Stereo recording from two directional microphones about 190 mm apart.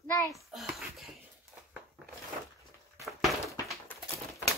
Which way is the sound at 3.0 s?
Centre (ahead or behind).